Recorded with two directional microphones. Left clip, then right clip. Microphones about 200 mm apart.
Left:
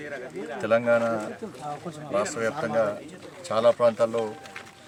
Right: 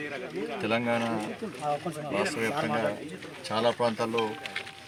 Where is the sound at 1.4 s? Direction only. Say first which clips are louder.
Even; 35° right (ahead or behind).